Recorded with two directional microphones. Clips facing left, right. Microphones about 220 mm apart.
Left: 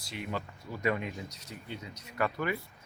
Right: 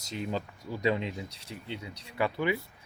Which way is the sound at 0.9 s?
25° right (ahead or behind).